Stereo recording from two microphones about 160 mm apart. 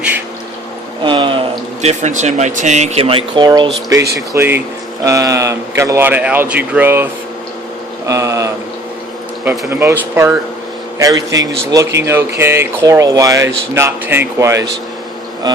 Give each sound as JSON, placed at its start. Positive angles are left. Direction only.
{"t": 1.0, "sound": "a man's voice", "side_deg": -30}
{"t": 15.5, "sound": "insect", "side_deg": -25}